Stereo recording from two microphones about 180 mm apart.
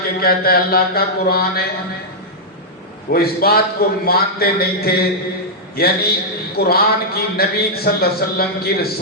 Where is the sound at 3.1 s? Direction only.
60° left (ahead or behind).